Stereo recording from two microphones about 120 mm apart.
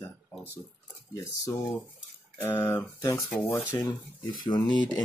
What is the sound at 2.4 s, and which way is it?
Speech, 20° left (ahead or behind).